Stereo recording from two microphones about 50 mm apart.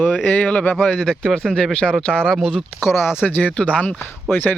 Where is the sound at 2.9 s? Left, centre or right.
Left.